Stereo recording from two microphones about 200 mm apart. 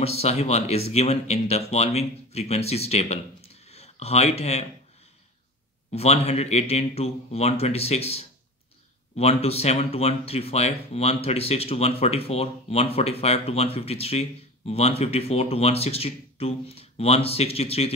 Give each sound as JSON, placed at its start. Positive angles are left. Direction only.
{"t": 0.0, "sound": "speech", "side_deg": 30}
{"t": 5.9, "sound": "speech", "side_deg": 30}